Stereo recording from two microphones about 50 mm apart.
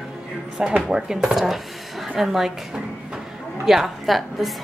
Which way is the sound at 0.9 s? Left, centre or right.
Centre.